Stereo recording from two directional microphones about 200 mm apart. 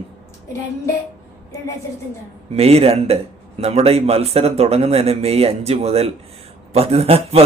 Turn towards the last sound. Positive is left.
turn(degrees=-30)  # may be behind; listen again after turning